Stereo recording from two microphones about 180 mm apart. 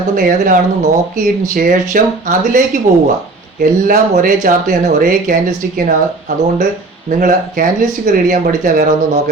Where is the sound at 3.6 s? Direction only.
50° right (ahead or behind).